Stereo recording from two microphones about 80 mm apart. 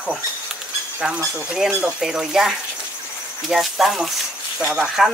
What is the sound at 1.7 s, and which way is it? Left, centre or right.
Speech, centre.